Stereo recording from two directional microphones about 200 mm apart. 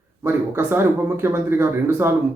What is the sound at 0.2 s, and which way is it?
Speech, 10° right (ahead or behind).